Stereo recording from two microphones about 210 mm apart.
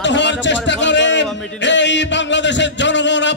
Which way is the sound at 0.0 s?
60° left (ahead or behind).